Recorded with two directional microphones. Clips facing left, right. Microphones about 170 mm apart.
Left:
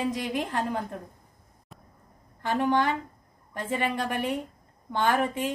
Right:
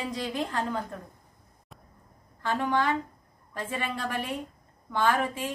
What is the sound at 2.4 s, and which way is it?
Speech, 20° left (ahead or behind).